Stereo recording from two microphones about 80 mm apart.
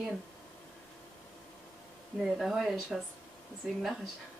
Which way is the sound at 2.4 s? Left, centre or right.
Centre.